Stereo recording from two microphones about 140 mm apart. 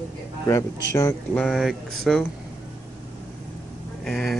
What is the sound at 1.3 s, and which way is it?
Speech, 5° left (ahead or behind).